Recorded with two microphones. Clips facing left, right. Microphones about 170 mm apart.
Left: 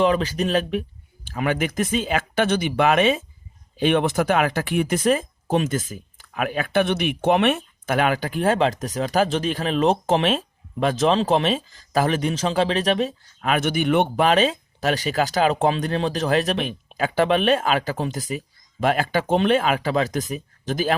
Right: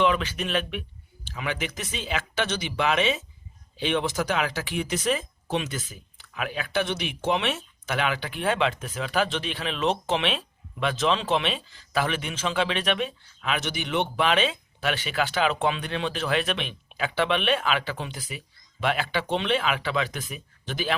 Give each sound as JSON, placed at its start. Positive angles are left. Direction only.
{"t": 0.0, "sound": "speech", "side_deg": 40}